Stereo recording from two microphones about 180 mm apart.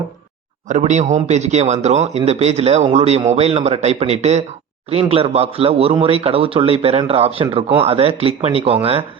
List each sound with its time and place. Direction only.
0.7 s a man's voice: 40° right (ahead or behind)